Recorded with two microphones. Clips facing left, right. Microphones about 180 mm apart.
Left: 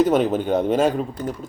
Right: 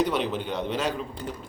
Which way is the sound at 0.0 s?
45° left (ahead or behind).